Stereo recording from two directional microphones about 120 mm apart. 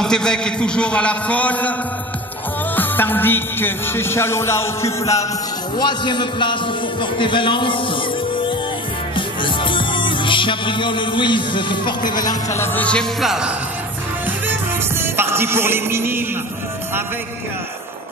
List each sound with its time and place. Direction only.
0.0 s a man's voice: 5° left (ahead or behind)
2.7 s music: 15° left (ahead or behind)
5.8 s a man's voice: 40° left (ahead or behind)
9.1 s music: 45° left (ahead or behind)
12.5 s a man's voice: 15° left (ahead or behind)
13.2 s speech: 5° right (ahead or behind)
14.2 s music: 15° right (ahead or behind)